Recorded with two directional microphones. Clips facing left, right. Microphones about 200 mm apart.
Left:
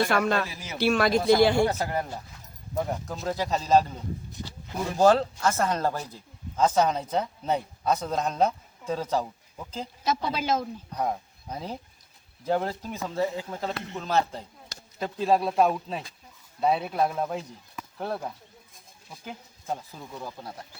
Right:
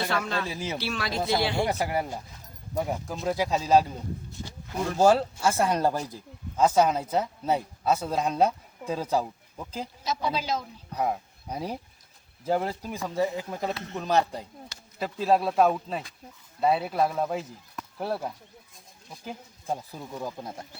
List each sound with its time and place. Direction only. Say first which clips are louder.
0.1 s speech: left 5 dB; 55° left (ahead or behind)
0.4 s a man's voice: right 6 dB; 30° right (ahead or behind)
0.8 s speech: left 9 dB; 50° left (ahead or behind)
1.6 s speech: left 1 dB; 10° right (ahead or behind)
4.9 s speech: left 1 dB; 10° right (ahead or behind)
10.0 s speech: left 2 dB; 55° left (ahead or behind)
10.9 s speech: right 2 dB; 10° right (ahead or behind)
14.9 s speech: even; 5° right (ahead or behind)
20.0 s speech: right 3 dB; 15° right (ahead or behind)